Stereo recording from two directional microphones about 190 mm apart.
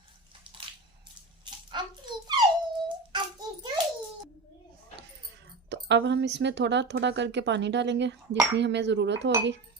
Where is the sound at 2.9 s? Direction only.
25° right (ahead or behind).